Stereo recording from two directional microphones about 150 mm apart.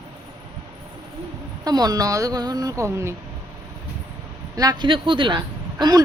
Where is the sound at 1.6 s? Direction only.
25° right (ahead or behind).